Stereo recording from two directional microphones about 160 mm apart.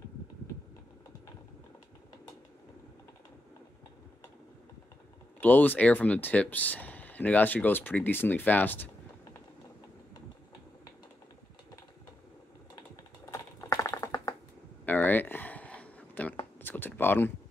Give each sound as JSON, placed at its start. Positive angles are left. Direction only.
{"t": 5.4, "sound": "speech", "side_deg": 10}
{"t": 12.7, "sound": "typing", "side_deg": 20}
{"t": 14.9, "sound": "a sound", "side_deg": 10}